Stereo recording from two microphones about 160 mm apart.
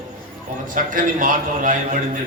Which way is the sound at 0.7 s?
60° right (ahead or behind).